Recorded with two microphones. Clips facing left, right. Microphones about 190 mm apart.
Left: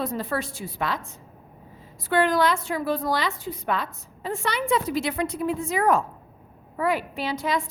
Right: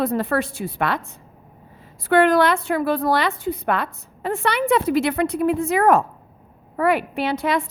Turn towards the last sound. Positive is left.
turn(degrees=-60)  # may be behind; listen again after turning